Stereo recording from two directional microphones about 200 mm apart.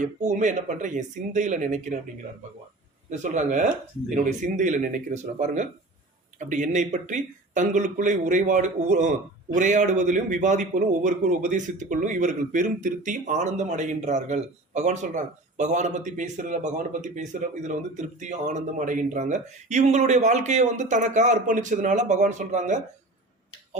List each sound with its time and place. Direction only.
0.0 s a man's voice: 35° right (ahead or behind)
3.1 s a man's voice: 35° right (ahead or behind)